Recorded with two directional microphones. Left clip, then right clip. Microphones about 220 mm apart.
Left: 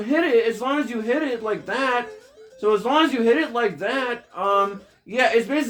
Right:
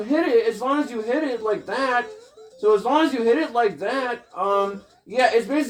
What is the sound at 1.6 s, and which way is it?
Speech, 20° left (ahead or behind).